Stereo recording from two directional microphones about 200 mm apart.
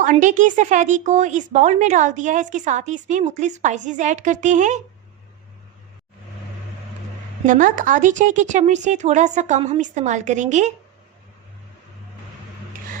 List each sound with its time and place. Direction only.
0.0 s a woman's voice: 40° right (ahead or behind)
7.4 s a woman's voice: 40° right (ahead or behind)